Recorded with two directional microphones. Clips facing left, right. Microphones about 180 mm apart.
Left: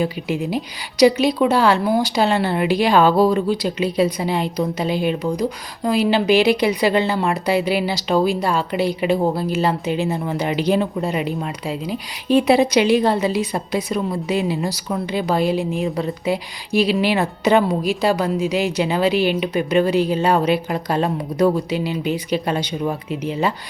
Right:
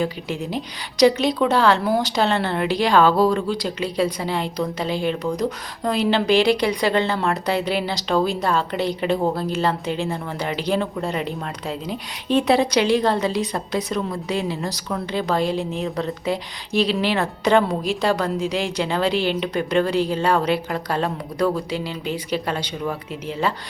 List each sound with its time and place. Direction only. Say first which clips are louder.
0.0 s a woman's voice: left 3 dB; 15° left (ahead or behind)